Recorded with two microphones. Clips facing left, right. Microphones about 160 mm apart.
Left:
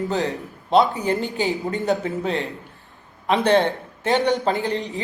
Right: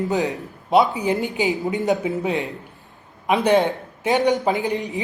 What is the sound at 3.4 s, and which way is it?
A man's voice, 15° right (ahead or behind).